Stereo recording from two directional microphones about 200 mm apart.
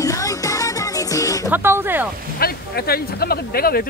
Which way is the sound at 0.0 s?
15° left (ahead or behind).